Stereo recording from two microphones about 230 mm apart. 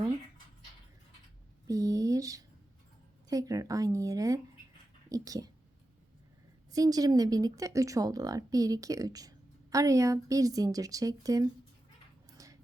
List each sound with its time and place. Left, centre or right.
1.6 s speech: centre
6.7 s speech: centre
12.4 s a sound: centre